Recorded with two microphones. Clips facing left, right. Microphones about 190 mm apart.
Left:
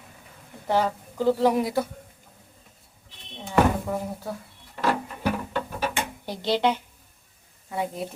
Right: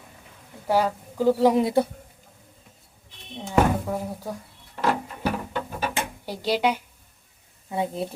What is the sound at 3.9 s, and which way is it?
Speech, 10° right (ahead or behind).